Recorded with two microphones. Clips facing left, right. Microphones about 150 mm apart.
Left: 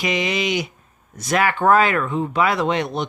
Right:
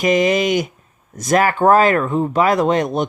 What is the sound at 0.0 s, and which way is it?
Speech, 45° right (ahead or behind).